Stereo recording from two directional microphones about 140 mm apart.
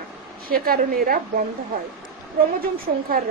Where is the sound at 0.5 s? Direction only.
90° right.